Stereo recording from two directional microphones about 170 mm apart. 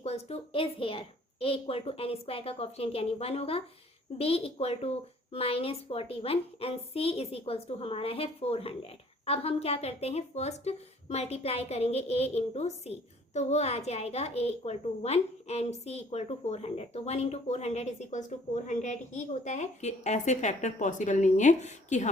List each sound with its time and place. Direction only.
0.0 s a woman's voice: 40° left (ahead or behind)